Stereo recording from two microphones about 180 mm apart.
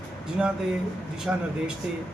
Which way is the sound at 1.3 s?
5° right (ahead or behind).